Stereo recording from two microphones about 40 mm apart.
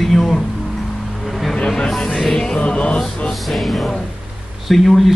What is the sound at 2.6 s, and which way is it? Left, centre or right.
Music, left.